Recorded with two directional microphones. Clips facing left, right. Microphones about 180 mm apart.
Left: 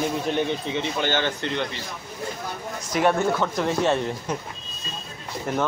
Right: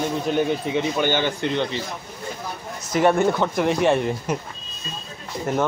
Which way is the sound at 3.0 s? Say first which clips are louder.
Right 3 dB; 15° right (ahead or behind).